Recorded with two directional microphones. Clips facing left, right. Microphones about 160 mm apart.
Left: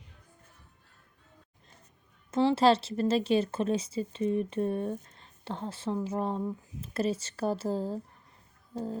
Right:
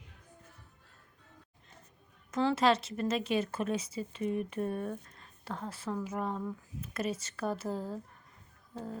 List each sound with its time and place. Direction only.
2.3 s speech: 30° left (ahead or behind)
8.7 s music: 30° left (ahead or behind)